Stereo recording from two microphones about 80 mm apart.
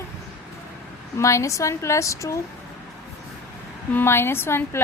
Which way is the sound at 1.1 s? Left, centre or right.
Left.